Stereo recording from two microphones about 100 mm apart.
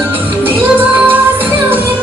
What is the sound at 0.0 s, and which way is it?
Music, 20° right (ahead or behind).